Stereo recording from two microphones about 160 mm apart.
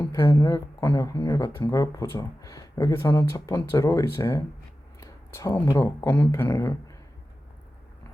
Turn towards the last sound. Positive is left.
turn(degrees=20)  # may be behind; listen again after turning